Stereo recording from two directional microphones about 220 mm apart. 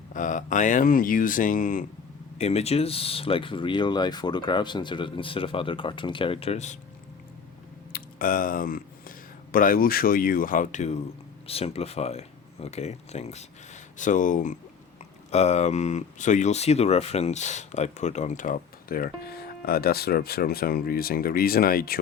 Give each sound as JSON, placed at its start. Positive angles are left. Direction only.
{"t": 0.1, "sound": "speech", "side_deg": 35}
{"t": 7.9, "sound": "speech", "side_deg": 40}